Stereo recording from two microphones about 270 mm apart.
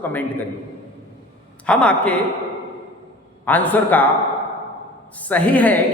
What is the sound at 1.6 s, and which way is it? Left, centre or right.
Speech, centre.